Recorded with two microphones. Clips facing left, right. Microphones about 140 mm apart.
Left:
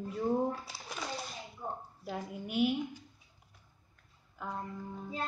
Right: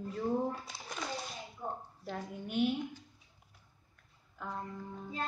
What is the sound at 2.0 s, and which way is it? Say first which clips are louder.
Speech: left 2 dB; 10° left (ahead or behind).